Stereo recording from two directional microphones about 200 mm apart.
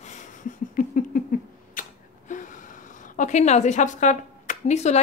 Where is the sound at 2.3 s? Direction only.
40° left (ahead or behind).